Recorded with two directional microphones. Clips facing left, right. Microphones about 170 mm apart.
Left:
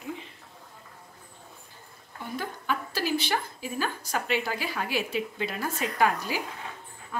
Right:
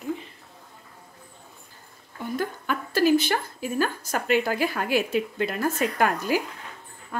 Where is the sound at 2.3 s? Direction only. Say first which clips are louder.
Right 3 dB; 50° right (ahead or behind).